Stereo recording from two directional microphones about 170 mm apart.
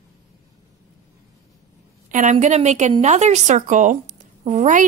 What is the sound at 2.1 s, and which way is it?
Speech, 45° right (ahead or behind).